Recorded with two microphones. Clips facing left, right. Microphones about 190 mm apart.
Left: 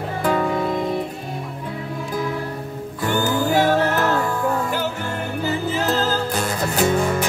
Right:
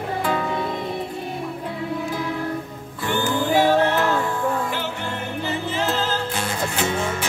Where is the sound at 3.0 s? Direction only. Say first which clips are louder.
Left 2 dB; 40° left (ahead or behind).